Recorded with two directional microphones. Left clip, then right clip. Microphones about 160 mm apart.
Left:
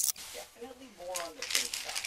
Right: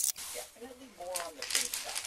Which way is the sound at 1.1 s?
20° right (ahead or behind).